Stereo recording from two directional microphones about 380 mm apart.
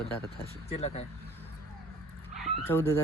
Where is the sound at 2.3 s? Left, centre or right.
Centre.